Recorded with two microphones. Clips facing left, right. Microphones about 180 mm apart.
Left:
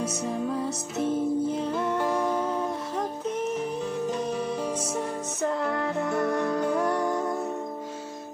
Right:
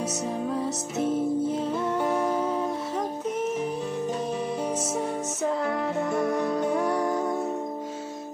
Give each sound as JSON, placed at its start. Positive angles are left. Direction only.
{"t": 0.0, "sound": "music", "side_deg": 0}
{"t": 4.7, "sound": "music", "side_deg": 0}